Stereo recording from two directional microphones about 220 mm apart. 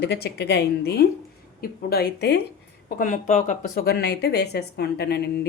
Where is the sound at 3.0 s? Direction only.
35° left (ahead or behind).